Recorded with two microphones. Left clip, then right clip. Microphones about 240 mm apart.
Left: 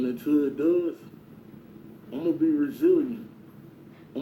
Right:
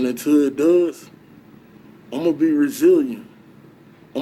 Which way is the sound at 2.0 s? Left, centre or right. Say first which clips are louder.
Right 6 dB; right.